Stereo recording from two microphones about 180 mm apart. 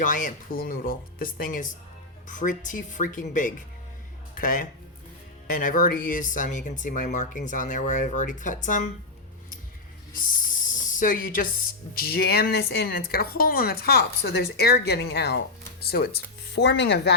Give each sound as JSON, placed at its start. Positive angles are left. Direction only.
{"t": 0.0, "sound": "speech", "side_deg": 45}
{"t": 10.2, "sound": "snake", "side_deg": 45}
{"t": 11.9, "sound": "speech", "side_deg": 60}